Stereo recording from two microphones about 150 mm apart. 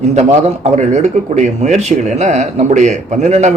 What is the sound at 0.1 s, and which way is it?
Speech, 50° right (ahead or behind).